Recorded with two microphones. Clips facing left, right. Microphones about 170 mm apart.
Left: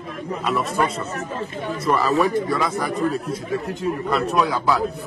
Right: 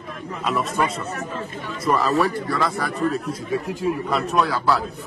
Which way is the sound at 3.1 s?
Centre (ahead or behind).